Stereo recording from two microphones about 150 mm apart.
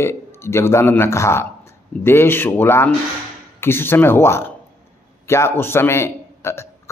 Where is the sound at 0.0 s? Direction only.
15° left (ahead or behind).